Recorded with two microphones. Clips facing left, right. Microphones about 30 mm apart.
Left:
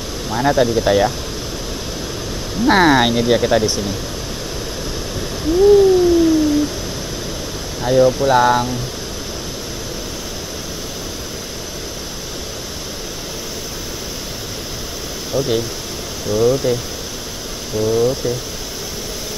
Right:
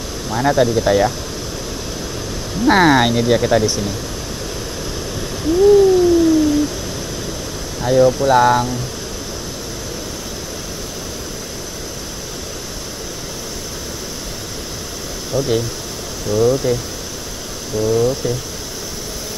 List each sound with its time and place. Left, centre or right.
0.3 s speech: centre
2.6 s speech: centre
5.4 s a sound: centre
7.8 s speech: centre
15.3 s speech: centre
17.7 s speech: centre